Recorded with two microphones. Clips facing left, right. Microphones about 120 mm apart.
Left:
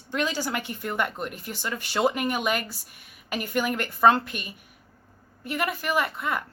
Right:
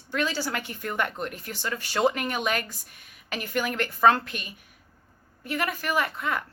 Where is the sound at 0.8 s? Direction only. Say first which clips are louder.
Even; 5° left (ahead or behind).